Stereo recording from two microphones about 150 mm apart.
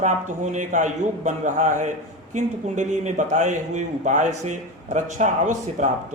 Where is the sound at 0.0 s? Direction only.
55° right (ahead or behind).